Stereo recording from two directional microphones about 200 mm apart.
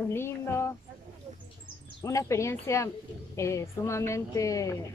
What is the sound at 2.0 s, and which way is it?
Speech, 15° left (ahead or behind).